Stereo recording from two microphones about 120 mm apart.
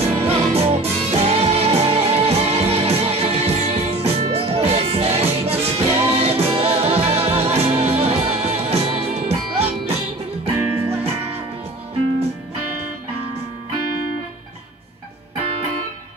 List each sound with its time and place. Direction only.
0.1 s music: 55° right (ahead or behind)
10.5 s music: 15° right (ahead or behind)